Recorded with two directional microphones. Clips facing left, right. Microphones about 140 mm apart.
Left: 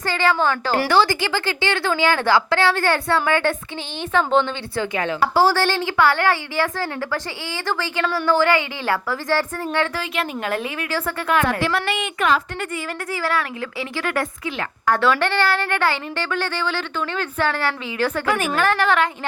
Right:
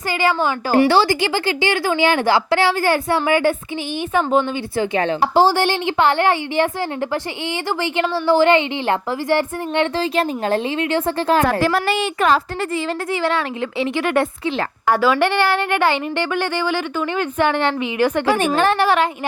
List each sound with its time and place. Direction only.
0.1 s a woman's voice: 15° right (ahead or behind)
4.9 s a woman's voice: 25° right (ahead or behind)
7.7 s a woman's voice: 20° right (ahead or behind); by 12.4 s 35° right (ahead or behind)
13.2 s a woman's voice: 25° right (ahead or behind)